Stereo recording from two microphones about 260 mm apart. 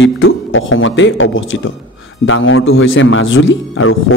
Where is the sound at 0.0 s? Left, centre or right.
Left.